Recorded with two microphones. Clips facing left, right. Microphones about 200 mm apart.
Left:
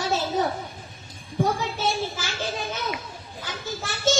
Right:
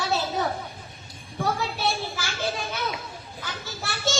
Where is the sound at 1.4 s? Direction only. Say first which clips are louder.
Left 2 dB; 20° left (ahead or behind).